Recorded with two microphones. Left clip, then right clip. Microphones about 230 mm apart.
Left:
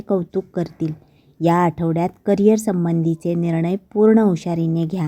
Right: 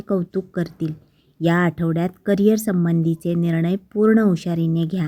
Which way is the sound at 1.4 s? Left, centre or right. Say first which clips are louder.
Left 3 dB; left.